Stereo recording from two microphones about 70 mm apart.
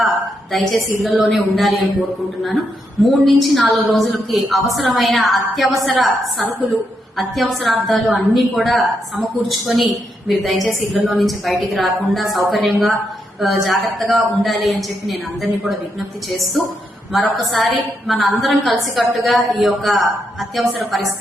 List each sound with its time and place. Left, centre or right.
0.5 s a woman's voice: centre